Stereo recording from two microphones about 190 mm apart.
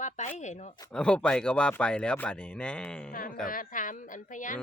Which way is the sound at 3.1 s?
45° left (ahead or behind).